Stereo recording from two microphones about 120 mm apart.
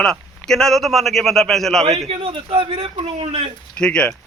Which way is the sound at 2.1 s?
50° right (ahead or behind).